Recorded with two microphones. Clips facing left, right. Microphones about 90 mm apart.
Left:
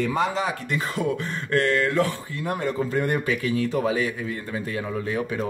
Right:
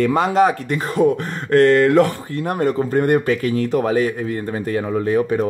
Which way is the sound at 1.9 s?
65° right (ahead or behind).